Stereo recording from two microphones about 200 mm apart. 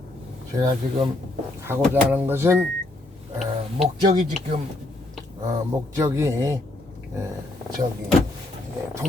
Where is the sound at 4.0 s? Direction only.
45° right (ahead or behind).